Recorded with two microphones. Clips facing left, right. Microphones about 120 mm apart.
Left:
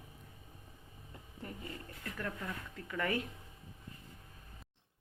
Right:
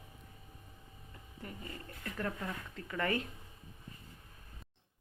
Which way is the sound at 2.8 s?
10° left (ahead or behind).